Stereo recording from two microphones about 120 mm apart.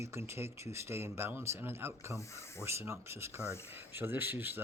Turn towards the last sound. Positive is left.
turn(degrees=-15)  # may be behind; listen again after turning